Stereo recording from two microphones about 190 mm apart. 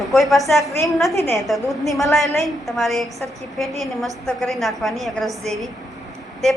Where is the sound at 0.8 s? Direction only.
Centre (ahead or behind).